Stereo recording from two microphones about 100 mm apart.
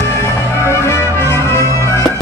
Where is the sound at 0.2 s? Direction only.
30° left (ahead or behind).